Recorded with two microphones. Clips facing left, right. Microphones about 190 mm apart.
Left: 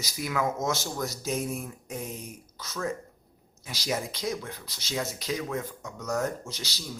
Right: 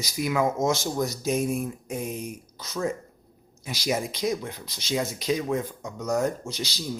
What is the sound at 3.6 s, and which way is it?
Speech, 15° right (ahead or behind).